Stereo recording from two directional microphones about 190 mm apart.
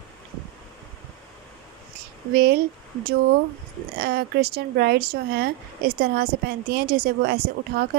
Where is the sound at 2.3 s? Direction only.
55° right (ahead or behind).